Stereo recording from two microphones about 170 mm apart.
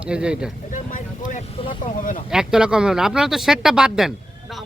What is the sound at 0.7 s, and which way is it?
Vehicle, 50° left (ahead or behind).